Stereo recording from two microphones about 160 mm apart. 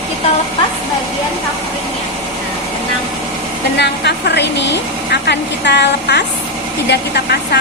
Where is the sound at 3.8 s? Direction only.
90° left.